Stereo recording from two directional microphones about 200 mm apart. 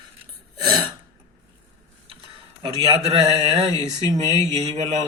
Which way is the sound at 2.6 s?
30° right (ahead or behind).